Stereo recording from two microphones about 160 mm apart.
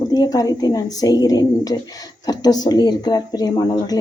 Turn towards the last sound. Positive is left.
turn(degrees=25)  # may be behind; listen again after turning